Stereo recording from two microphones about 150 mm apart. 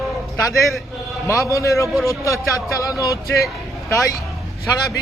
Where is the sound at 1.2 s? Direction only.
20° left (ahead or behind).